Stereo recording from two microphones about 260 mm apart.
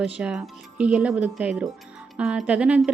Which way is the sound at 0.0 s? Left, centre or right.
Centre.